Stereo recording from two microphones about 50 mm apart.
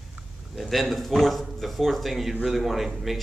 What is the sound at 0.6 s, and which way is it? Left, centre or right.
A man's voice, centre.